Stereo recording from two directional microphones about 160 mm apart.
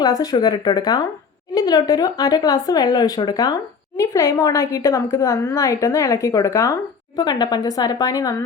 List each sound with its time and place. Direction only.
0.0 s speech: 25° left (ahead or behind)